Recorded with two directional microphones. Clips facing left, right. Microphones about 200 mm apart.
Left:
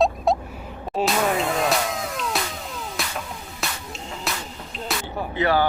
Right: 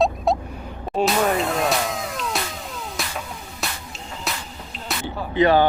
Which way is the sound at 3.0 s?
Centre (ahead or behind).